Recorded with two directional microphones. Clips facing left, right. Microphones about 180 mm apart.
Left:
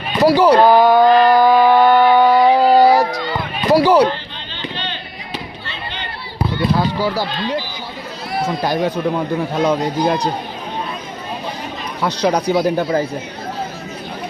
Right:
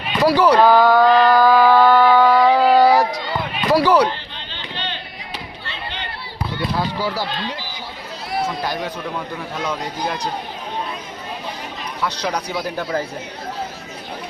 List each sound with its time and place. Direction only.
0.2 s a sound: 25° left (ahead or behind)
3.7 s basketball bounce: 25° left (ahead or behind)
6.7 s run: 50° left (ahead or behind)
8.6 s speech: 30° left (ahead or behind)
12.2 s speech: 40° left (ahead or behind)
12.6 s speech: 20° left (ahead or behind)